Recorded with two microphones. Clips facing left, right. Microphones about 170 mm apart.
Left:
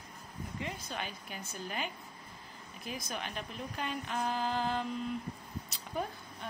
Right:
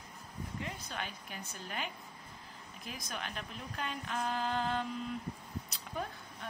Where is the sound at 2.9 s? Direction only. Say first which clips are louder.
Left 3 dB; centre (ahead or behind).